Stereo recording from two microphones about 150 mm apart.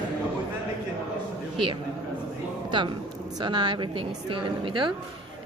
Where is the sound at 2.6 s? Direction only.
30° right (ahead or behind).